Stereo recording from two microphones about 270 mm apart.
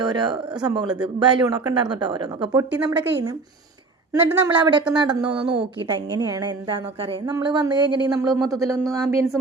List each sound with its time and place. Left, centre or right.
0.0 s a woman's voice: centre